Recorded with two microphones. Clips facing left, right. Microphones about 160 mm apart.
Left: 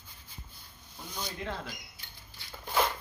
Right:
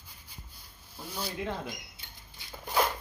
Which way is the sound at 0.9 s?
5° right (ahead or behind).